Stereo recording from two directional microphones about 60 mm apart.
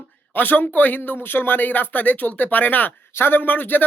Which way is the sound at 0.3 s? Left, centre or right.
Left.